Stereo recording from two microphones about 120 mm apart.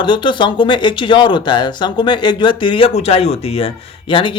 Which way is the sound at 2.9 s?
60° left (ahead or behind).